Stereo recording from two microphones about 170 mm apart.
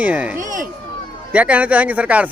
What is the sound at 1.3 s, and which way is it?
A man's voice, 10° right (ahead or behind).